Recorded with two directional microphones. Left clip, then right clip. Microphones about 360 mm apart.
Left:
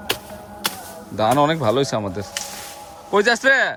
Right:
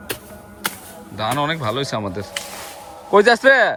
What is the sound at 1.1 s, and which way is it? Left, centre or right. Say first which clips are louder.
Speech: left 4 dB; centre.